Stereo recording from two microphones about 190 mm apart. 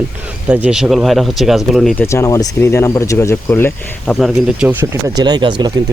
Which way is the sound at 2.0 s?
15° left (ahead or behind).